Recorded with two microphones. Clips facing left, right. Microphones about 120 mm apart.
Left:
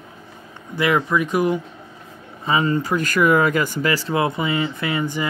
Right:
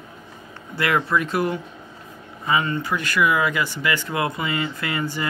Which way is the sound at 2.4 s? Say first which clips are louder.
Left 3 dB; 30° left (ahead or behind).